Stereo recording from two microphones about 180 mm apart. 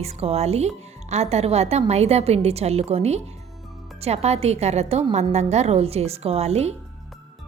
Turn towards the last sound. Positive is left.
turn(degrees=-35)  # may be behind; listen again after turning